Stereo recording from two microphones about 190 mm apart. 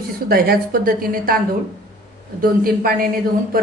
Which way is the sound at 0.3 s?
50° right (ahead or behind).